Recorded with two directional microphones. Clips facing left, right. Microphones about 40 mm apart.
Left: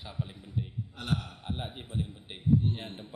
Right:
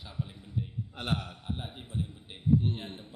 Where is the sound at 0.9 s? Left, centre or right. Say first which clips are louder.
Even; right.